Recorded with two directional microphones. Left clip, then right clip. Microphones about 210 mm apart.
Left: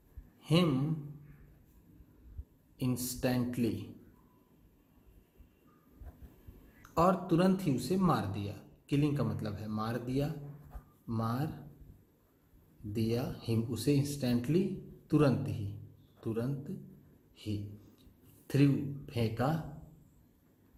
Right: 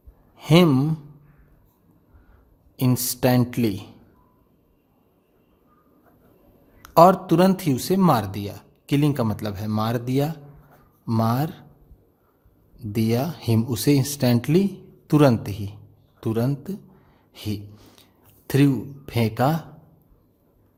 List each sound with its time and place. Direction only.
0.3 s a sound: 50° right (ahead or behind)
2.7 s a man's voice: 55° right (ahead or behind)
6.8 s a man's voice: 55° right (ahead or behind)
12.9 s speech: 55° right (ahead or behind)
17.3 s a sound: 55° right (ahead or behind)
18.4 s speech: 55° right (ahead or behind)